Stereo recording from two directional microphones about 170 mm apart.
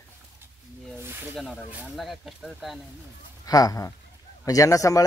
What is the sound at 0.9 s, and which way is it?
Snake, 15° right (ahead or behind).